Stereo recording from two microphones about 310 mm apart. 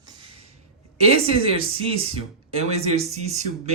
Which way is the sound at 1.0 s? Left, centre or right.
Centre.